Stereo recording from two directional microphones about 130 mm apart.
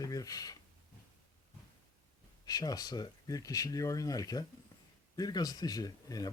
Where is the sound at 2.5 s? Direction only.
30° left (ahead or behind).